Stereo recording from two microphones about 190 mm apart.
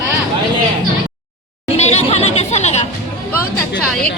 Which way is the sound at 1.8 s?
35° left (ahead or behind).